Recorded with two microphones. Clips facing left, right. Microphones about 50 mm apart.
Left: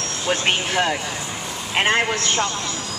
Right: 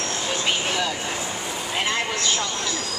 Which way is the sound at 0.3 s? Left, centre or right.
Left.